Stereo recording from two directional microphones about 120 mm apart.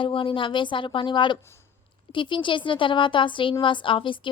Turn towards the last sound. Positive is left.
turn(degrees=45)  # may be behind; listen again after turning